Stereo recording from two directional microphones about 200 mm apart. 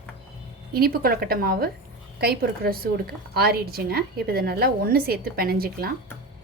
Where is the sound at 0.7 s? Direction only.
50° right (ahead or behind).